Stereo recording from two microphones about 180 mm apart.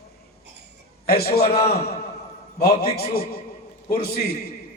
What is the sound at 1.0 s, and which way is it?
Speech, 60° left (ahead or behind).